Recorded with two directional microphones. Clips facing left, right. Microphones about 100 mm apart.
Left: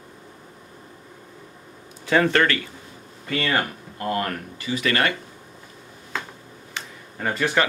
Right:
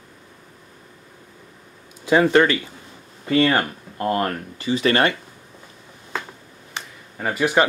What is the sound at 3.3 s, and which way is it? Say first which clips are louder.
Speech: right 6 dB; 30° right (ahead or behind).